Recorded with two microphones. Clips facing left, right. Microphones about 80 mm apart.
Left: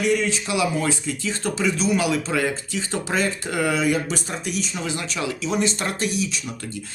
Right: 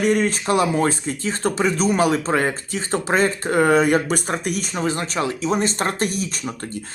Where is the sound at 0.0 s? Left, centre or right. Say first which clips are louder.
Right 3 dB; right.